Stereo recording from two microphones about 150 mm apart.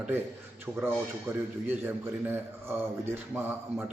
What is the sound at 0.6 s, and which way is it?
A man's voice, 15° right (ahead or behind).